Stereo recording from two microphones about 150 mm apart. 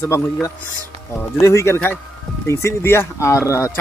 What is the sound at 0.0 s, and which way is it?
Speech, 20° left (ahead or behind).